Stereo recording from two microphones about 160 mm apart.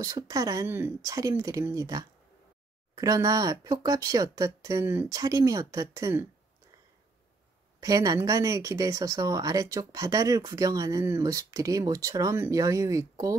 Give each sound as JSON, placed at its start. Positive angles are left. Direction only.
{"t": 0.0, "sound": "speech", "side_deg": -20}
{"t": 7.8, "sound": "speech", "side_deg": -20}